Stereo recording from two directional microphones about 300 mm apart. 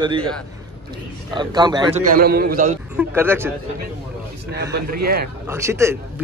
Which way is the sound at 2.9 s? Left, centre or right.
Centre.